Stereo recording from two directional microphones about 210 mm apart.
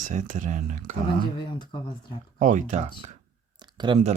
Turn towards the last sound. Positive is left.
turn(degrees=-25)  # may be behind; listen again after turning